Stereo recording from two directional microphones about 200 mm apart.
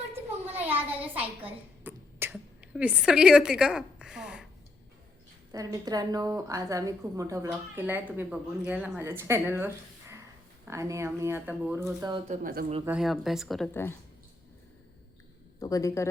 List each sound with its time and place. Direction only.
0.6 s a sound: 10° right (ahead or behind)
5.5 s a woman's voice: 20° right (ahead or behind)
12.3 s speech: 40° right (ahead or behind)
12.8 s a woman's voice: 5° right (ahead or behind)
15.6 s speech: 15° left (ahead or behind)